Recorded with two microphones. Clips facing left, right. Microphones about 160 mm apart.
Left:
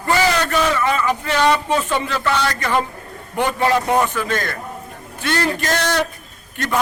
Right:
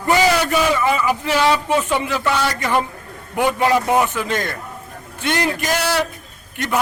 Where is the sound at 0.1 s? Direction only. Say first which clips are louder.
Right 2 dB; 15° right (ahead or behind).